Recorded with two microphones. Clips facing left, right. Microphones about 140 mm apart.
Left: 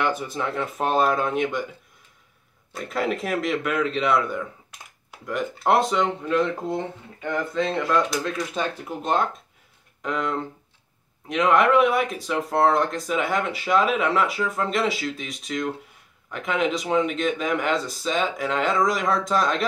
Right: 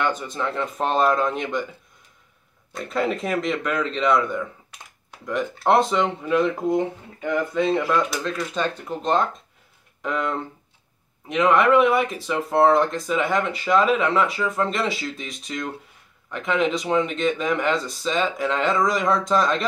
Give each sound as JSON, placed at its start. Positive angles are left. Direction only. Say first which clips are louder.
{"t": 0.0, "sound": "speech", "louder": "even", "side_deg": 10}
{"t": 2.7, "sound": "speech", "louder": "right 2 dB", "side_deg": 0}
{"t": 8.2, "sound": "speech", "louder": "right 1 dB", "side_deg": 10}